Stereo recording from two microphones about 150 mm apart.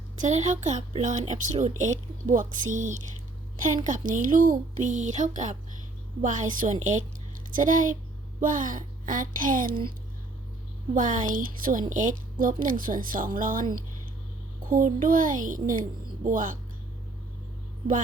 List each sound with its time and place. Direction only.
0.2 s speech: 50° right (ahead or behind)
10.9 s speech: 55° right (ahead or behind)